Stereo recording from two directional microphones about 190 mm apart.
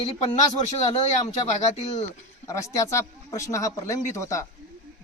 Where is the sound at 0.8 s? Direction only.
35° left (ahead or behind).